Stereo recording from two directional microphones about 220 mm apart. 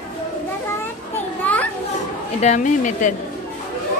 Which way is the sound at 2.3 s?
30° left (ahead or behind).